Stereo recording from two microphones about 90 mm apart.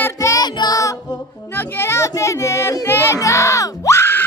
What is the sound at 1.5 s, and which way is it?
Music, 30° left (ahead or behind).